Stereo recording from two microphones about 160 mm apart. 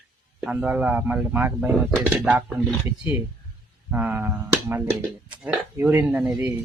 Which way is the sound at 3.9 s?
10° right (ahead or behind).